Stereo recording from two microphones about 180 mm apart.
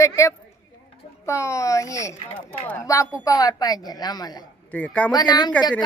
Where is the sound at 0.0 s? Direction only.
15° left (ahead or behind).